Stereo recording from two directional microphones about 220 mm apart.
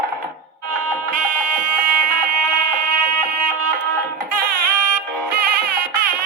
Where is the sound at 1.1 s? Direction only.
40° right (ahead or behind).